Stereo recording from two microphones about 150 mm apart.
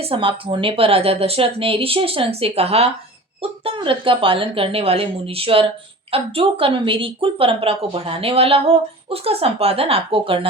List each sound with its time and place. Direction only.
0.0 s a woman's voice: 35° right (ahead or behind)